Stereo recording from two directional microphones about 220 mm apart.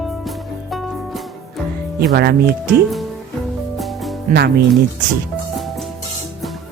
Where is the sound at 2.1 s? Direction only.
45° right (ahead or behind).